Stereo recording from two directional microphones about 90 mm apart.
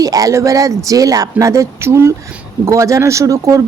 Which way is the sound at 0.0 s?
40° right (ahead or behind).